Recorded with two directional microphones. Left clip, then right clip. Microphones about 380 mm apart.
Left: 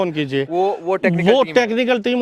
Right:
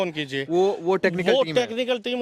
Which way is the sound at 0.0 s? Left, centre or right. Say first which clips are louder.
Left 6 dB; centre.